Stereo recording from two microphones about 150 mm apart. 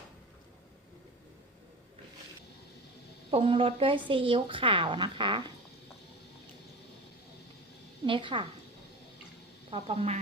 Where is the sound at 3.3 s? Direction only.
35° right (ahead or behind).